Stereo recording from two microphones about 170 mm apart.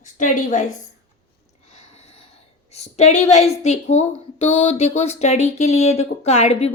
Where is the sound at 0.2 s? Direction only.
50° left (ahead or behind).